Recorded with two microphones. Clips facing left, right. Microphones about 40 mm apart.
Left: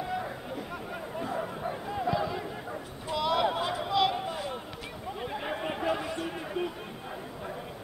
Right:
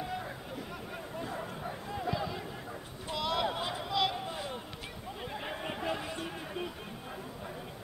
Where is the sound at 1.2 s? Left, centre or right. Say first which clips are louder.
Left 7 dB; left.